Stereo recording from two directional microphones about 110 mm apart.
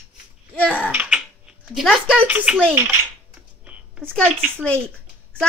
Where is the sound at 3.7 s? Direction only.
15° right (ahead or behind).